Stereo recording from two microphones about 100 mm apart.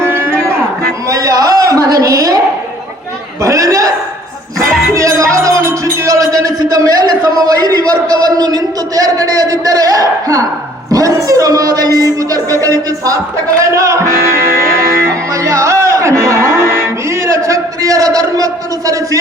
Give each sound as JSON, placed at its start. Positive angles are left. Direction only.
{"t": 0.0, "sound": "cattle", "side_deg": -25}
{"t": 1.1, "sound": "a sound", "side_deg": -35}
{"t": 3.4, "sound": "chuckle", "side_deg": -35}
{"t": 4.9, "sound": "music", "side_deg": -30}
{"t": 8.1, "sound": "a man's voice", "side_deg": -40}
{"t": 15.4, "sound": "music", "side_deg": -30}